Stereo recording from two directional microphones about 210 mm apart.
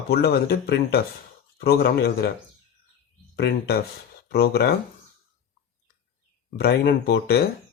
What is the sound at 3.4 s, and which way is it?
Speech, 50° left (ahead or behind).